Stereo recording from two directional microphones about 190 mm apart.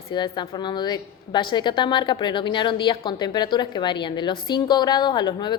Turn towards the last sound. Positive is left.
turn(degrees=25)  # may be behind; listen again after turning